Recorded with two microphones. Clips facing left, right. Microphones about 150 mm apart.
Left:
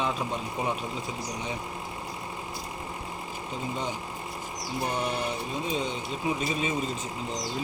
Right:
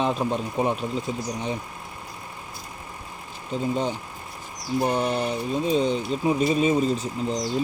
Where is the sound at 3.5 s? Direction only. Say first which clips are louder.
Right 8 dB; 30° right (ahead or behind).